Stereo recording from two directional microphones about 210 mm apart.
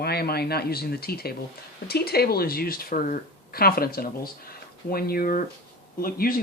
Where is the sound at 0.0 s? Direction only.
50° left (ahead or behind).